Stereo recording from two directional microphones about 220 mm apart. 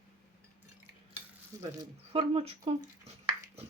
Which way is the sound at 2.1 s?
25° right (ahead or behind).